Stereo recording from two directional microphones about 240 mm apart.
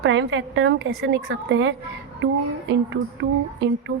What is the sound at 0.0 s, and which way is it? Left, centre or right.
A woman's voice, right.